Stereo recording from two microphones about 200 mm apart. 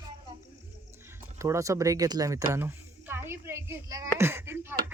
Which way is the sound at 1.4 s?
15° right (ahead or behind).